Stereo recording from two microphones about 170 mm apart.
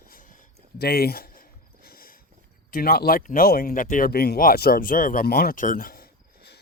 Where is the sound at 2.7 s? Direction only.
60° left (ahead or behind).